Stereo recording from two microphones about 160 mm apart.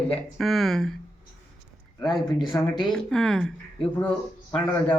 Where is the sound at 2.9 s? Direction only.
5° left (ahead or behind).